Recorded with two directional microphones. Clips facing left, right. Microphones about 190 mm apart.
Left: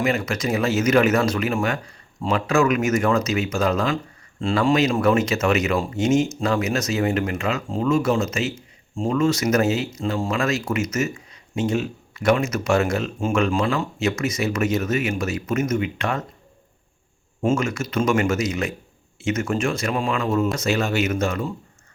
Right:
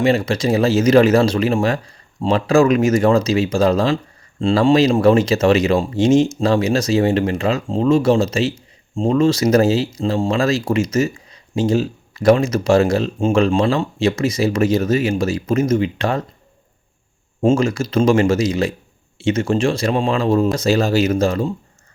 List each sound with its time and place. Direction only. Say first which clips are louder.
0.0 s speech: right 6 dB; 30° right (ahead or behind)
17.4 s speech: right 6 dB; 30° right (ahead or behind)